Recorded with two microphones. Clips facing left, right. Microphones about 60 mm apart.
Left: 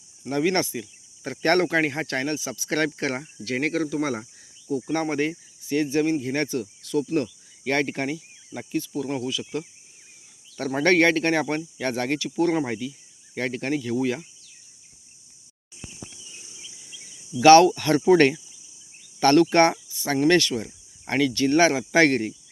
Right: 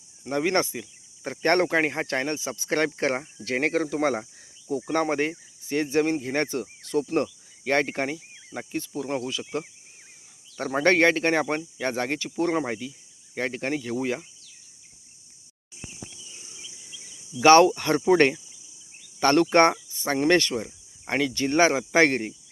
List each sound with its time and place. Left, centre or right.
0.3 s speech: right
10.7 s speech: centre
17.4 s speech: right